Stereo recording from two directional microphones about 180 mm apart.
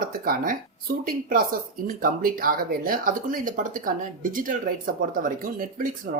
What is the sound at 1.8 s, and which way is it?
Speech, 50° right (ahead or behind).